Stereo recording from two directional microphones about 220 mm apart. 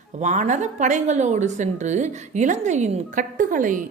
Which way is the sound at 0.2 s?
35° right (ahead or behind).